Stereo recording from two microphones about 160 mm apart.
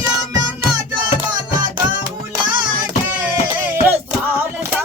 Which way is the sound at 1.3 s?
25° right (ahead or behind).